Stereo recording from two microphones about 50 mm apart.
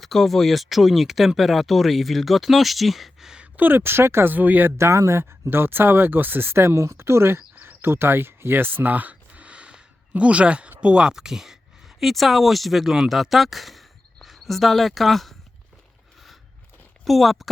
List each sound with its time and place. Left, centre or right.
0.0 s speech: centre
3.6 s speech: right
4.4 s speech: right
4.8 s speech: right
5.5 s speech: right; by 15.4 s centre
17.1 s speech: centre